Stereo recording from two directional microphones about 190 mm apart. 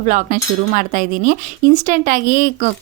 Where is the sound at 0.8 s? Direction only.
45° right (ahead or behind).